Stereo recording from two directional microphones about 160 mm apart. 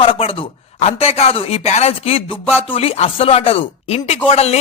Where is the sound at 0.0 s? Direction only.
35° left (ahead or behind).